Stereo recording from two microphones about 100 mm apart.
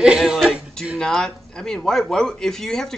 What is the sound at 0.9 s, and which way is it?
A man's voice, 5° left (ahead or behind).